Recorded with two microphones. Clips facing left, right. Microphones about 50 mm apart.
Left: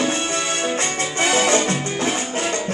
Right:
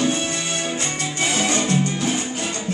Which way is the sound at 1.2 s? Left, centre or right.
Left.